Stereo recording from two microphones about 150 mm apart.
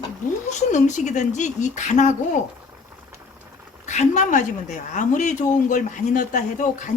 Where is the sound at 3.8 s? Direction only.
50° left (ahead or behind).